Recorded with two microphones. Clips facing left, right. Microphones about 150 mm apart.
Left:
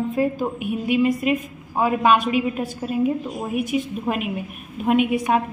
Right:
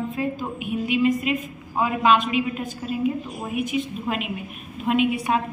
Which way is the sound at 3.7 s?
45° left (ahead or behind).